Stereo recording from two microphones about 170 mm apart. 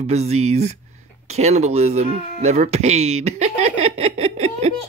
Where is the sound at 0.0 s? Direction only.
40° right (ahead or behind).